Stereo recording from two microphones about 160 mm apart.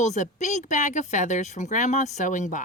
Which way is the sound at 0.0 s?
45° left (ahead or behind).